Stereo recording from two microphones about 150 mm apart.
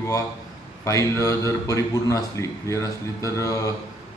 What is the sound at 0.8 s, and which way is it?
A man's voice, 20° left (ahead or behind).